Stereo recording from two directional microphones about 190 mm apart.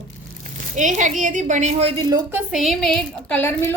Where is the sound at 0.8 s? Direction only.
40° right (ahead or behind).